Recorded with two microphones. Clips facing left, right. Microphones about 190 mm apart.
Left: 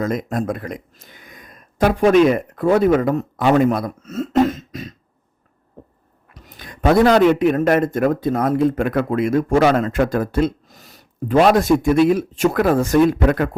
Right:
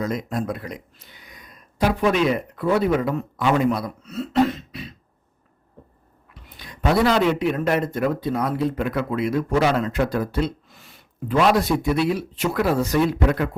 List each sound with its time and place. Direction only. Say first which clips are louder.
0.0 s speech: left 4 dB; 50° left (ahead or behind)
6.3 s speech: left 3 dB; 40° left (ahead or behind)